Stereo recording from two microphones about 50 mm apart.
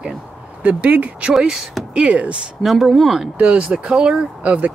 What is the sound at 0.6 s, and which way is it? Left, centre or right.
Speech, right.